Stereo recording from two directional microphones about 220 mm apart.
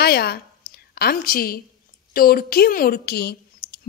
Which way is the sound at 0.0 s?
45° left (ahead or behind).